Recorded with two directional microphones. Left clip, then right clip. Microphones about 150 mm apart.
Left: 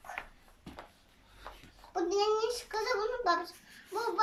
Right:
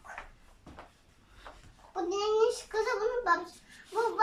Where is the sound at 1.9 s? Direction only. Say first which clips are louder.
Even; 35° left (ahead or behind).